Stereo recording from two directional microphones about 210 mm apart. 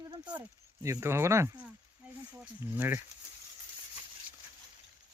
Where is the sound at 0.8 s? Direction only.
10° right (ahead or behind).